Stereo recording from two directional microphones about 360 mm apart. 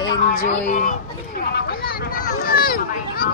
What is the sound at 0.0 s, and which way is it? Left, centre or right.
Speech, centre.